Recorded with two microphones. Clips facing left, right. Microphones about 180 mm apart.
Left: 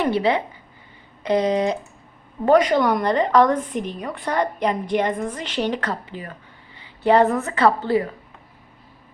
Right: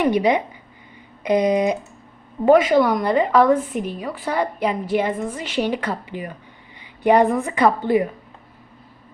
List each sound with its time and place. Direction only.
0.0 s a woman's voice: 15° right (ahead or behind)